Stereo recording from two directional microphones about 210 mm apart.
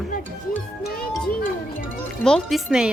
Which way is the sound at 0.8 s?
45° left (ahead or behind).